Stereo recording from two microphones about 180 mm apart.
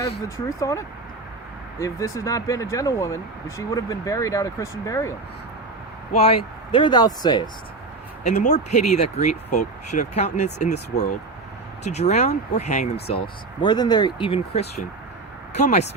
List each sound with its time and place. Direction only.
0.6 s speech: 20° left (ahead or behind)
6.1 s speech: 30° left (ahead or behind)
8.2 s speech: 40° left (ahead or behind)